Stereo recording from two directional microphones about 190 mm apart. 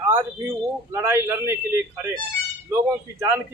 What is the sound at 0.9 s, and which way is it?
Speech, 10° right (ahead or behind).